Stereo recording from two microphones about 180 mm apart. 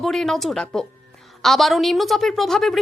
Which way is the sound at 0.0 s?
Centre (ahead or behind).